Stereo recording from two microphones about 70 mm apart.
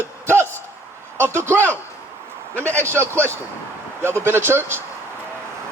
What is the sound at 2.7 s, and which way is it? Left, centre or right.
Speech, right.